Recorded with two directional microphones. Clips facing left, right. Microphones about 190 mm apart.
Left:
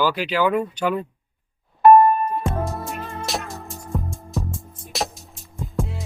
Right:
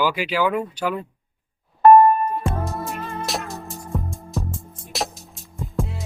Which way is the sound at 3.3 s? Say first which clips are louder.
Even; centre (ahead or behind).